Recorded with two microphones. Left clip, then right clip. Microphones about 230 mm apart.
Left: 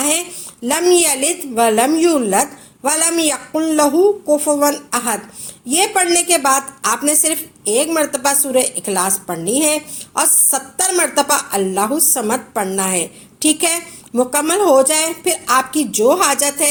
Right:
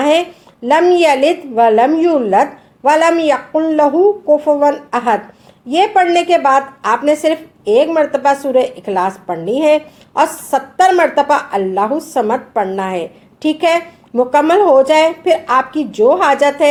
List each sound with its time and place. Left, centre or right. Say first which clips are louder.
0.0 s a woman's voice: right 8 dB; left